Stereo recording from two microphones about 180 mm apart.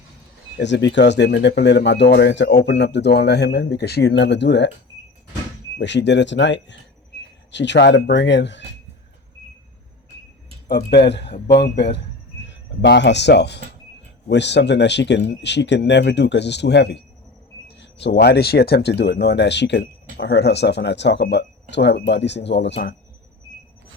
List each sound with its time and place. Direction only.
0.6 s speech: 80° left
5.8 s speech: 75° left (ahead or behind)
7.1 s a sound: 70° left (ahead or behind)
7.5 s speech: 80° left
10.7 s speech: 65° left (ahead or behind)